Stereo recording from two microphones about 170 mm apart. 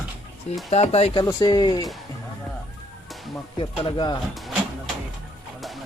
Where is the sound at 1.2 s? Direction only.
25° left (ahead or behind).